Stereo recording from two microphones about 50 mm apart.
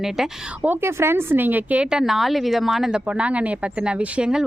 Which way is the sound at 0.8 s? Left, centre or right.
Right.